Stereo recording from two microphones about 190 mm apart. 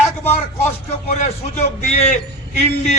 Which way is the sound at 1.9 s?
35° left (ahead or behind).